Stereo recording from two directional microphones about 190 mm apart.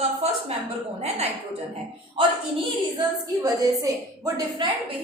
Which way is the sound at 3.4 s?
15° right (ahead or behind).